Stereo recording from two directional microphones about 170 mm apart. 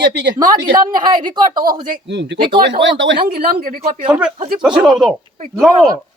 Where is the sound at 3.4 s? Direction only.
55° right (ahead or behind).